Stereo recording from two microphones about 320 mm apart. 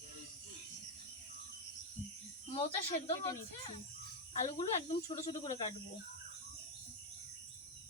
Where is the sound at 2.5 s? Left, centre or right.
Centre.